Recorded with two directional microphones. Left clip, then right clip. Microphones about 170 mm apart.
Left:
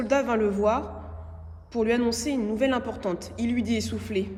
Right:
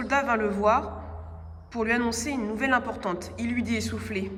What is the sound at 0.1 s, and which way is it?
A man's voice, centre (ahead or behind).